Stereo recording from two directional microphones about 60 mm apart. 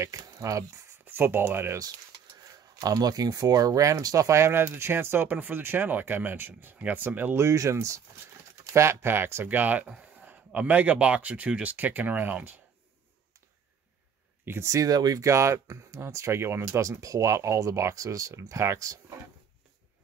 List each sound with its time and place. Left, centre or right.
0.1 s speech: right
1.0 s speech: right
2.7 s speech: right
7.3 s speech: right
8.7 s speech: right
9.8 s speech: centre
14.6 s speech: right
16.8 s speech: right
17.6 s speech: right